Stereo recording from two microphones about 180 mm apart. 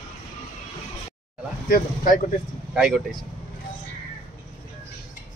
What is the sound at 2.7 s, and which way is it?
Speech, 5° right (ahead or behind).